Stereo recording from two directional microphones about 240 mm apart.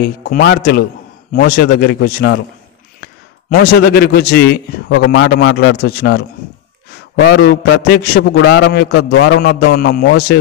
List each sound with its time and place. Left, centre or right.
0.0 s a man's voice: left
3.4 s a man's voice: left